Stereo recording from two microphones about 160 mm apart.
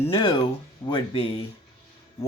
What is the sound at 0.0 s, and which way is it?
Speech, 35° left (ahead or behind).